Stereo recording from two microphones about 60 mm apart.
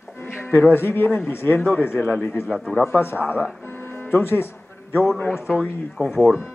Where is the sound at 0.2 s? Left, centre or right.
Left.